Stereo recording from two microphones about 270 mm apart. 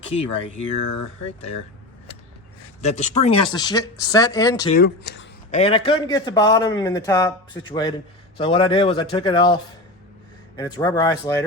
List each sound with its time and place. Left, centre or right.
0.1 s speech: left
2.8 s speech: left
4.7 s speech: left
5.5 s speech: left
10.6 s speech: centre